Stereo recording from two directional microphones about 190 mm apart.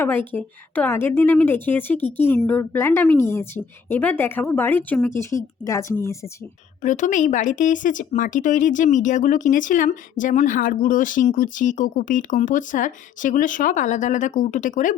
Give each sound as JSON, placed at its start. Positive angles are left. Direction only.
{"t": 0.0, "sound": "a woman's voice", "side_deg": 10}
{"t": 6.8, "sound": "speech", "side_deg": 40}